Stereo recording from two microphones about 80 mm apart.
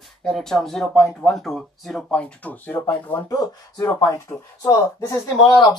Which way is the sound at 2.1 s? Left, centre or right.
Centre.